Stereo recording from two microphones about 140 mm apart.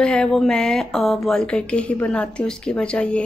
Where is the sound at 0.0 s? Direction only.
5° left (ahead or behind).